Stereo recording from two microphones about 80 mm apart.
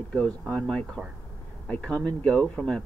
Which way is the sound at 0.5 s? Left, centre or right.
Centre.